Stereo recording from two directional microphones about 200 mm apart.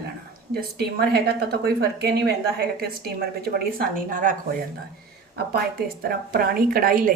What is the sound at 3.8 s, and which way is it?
Speech, 40° right (ahead or behind).